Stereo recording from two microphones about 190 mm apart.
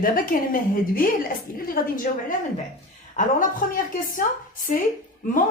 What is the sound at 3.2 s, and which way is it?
Speech, 40° left (ahead or behind).